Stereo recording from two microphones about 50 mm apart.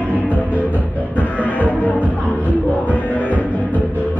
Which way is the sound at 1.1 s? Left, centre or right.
Left.